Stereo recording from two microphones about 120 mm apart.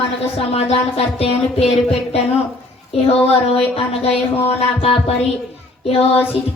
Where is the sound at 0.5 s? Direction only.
55° left (ahead or behind).